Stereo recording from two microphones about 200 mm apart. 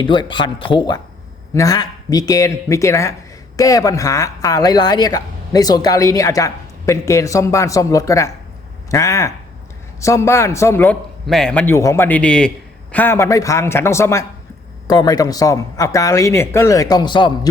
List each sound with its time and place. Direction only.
0.0 s speech: 25° left (ahead or behind)